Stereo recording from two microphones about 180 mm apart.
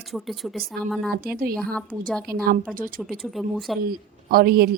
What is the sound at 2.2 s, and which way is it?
Speech, 55° right (ahead or behind).